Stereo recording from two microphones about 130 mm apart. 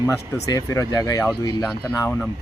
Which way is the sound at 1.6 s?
15° left (ahead or behind).